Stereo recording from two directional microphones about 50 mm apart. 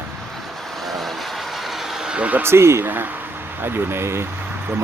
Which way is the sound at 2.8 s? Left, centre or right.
Right.